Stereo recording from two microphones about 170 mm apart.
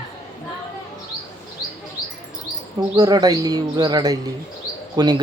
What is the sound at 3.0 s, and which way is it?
Speech, 20° right (ahead or behind).